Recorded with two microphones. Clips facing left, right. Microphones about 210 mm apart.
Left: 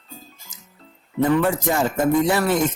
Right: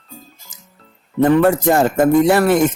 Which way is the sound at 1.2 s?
65° right (ahead or behind).